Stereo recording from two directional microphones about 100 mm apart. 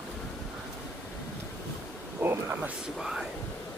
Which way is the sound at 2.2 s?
25° right (ahead or behind).